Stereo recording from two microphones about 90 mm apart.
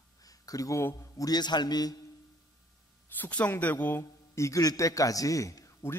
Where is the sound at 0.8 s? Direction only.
35° left (ahead or behind).